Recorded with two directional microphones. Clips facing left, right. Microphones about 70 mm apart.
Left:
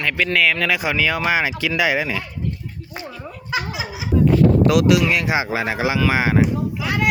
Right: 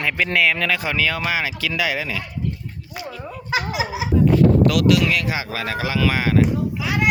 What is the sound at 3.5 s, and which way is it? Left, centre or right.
Laughter, right.